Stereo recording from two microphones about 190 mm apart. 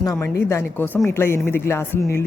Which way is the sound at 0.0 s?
15° left (ahead or behind).